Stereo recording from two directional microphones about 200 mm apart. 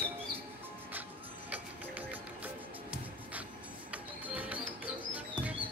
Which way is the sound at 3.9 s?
5° right (ahead or behind).